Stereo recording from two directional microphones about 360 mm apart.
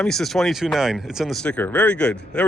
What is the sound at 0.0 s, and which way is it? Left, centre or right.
Speech, centre.